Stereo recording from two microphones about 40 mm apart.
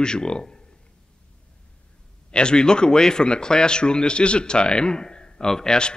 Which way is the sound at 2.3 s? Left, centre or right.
Left.